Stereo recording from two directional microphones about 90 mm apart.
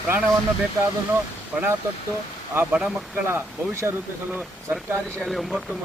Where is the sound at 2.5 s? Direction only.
25° right (ahead or behind).